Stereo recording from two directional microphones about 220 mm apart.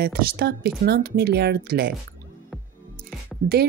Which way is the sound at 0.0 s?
45° right (ahead or behind).